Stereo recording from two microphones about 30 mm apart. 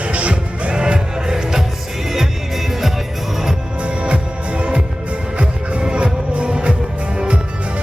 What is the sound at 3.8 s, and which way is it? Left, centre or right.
Music, right.